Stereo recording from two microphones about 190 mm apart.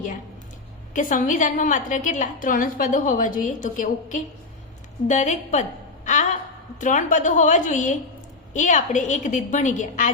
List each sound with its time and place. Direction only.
0.9 s a woman's voice: 45° left (ahead or behind)